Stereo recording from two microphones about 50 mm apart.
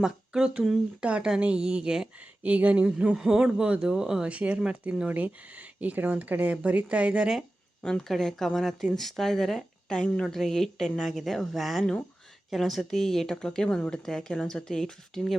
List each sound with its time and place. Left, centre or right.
0.0 s speech: centre
1.0 s a woman's voice: right
2.4 s speech: right
2.8 s a woman's voice: right
4.3 s speech: right
7.8 s speech: centre
11.2 s speech: centre